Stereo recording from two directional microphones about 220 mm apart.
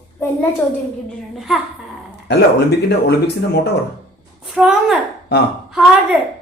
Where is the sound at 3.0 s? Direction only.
50° left (ahead or behind).